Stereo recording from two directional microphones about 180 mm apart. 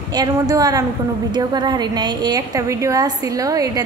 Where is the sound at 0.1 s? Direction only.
20° right (ahead or behind).